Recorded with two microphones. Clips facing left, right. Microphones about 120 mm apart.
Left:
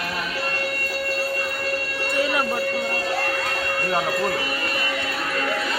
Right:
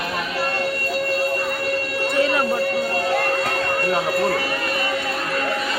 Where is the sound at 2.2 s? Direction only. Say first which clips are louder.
Right 3 dB; 5° left (ahead or behind).